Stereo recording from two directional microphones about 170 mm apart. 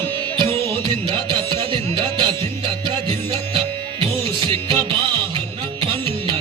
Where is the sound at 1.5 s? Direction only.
30° right (ahead or behind).